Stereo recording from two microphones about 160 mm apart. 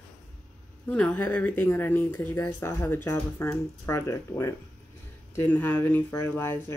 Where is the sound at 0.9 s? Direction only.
10° left (ahead or behind).